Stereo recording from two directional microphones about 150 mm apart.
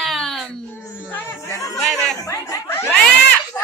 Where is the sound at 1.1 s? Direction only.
15° left (ahead or behind).